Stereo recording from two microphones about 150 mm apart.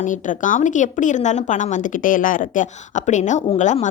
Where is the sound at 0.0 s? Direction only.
60° left (ahead or behind).